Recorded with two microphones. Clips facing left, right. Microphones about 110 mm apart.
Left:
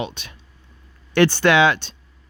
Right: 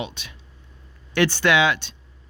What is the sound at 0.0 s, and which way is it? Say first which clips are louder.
Speech: left 3 dB; 50° left (ahead or behind).